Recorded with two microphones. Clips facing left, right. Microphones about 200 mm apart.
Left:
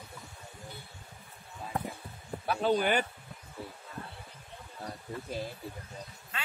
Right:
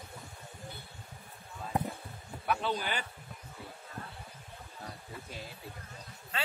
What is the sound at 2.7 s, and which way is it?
Speech, 55° left (ahead or behind).